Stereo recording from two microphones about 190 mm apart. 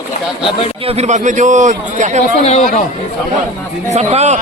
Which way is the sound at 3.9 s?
35° right (ahead or behind).